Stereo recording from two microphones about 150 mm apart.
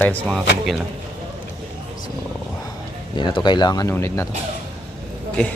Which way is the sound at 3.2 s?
30° left (ahead or behind).